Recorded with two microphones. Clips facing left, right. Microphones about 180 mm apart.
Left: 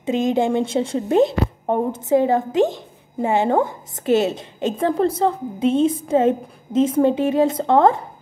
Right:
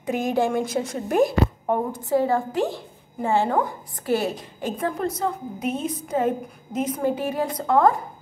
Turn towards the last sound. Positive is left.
turn(degrees=25)  # may be behind; listen again after turning